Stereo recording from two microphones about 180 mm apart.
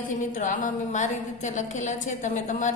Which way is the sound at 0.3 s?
45° left (ahead or behind).